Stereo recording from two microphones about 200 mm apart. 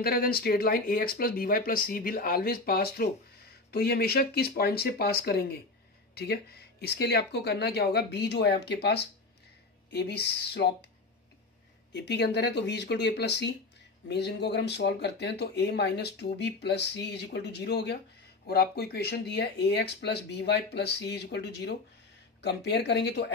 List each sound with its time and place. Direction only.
0.0 s speech: 50° left (ahead or behind)
11.9 s speech: 60° left (ahead or behind)